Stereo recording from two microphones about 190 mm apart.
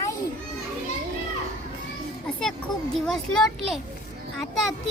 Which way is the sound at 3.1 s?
Centre (ahead or behind).